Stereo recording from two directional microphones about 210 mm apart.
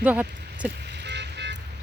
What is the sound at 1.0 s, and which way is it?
Vehicle, 55° right (ahead or behind).